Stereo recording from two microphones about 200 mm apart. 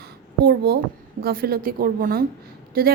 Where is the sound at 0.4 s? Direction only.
50° right (ahead or behind).